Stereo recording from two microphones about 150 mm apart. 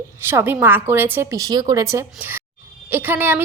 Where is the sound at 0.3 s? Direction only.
15° right (ahead or behind).